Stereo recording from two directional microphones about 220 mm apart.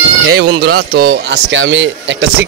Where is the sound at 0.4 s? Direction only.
45° right (ahead or behind).